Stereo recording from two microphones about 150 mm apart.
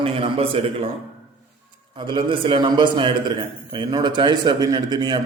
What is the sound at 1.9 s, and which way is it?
A man's voice, 35° right (ahead or behind).